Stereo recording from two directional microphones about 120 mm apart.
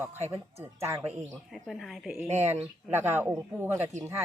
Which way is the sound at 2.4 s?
15° right (ahead or behind).